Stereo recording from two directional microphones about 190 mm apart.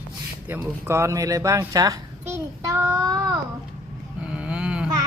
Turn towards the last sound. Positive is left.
turn(degrees=-5)  # may be behind; listen again after turning